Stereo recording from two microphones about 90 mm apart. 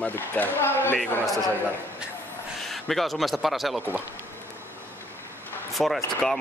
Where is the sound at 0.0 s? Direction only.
20° left (ahead or behind).